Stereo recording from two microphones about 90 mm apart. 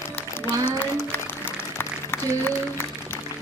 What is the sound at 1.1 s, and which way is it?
Music, 25° left (ahead or behind).